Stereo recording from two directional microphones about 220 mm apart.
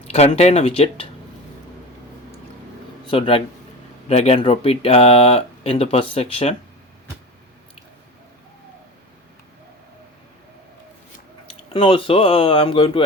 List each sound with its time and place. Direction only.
0.1 s speech: 30° left (ahead or behind)
3.1 s speech: 25° left (ahead or behind)
11.4 s speech: 25° left (ahead or behind)